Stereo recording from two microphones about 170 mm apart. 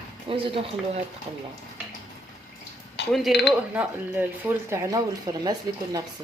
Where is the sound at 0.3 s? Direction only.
30° right (ahead or behind).